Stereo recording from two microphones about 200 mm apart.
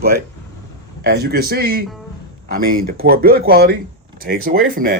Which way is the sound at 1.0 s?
50° right (ahead or behind).